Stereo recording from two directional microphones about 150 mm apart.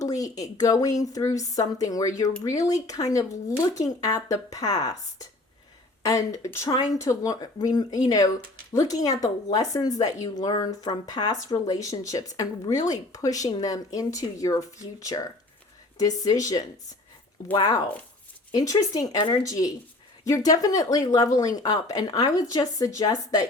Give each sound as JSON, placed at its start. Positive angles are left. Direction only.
{"t": 0.0, "sound": "speech", "side_deg": 25}
{"t": 6.1, "sound": "speech", "side_deg": 20}